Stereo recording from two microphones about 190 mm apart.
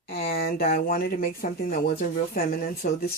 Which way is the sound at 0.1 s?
55° left (ahead or behind).